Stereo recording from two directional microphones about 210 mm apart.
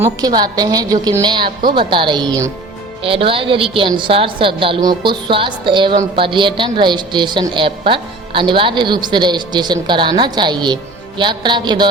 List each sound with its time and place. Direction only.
0.0 s a woman's voice: 20° right (ahead or behind)